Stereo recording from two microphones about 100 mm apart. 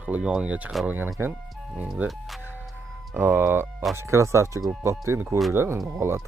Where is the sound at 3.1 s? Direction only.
20° right (ahead or behind).